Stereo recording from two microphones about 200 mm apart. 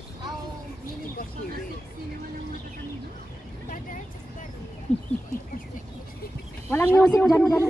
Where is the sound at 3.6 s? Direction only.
40° left (ahead or behind).